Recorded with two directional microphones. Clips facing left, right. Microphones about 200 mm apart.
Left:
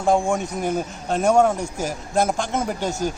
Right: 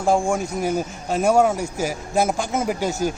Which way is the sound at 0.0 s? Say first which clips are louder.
Even; centre (ahead or behind).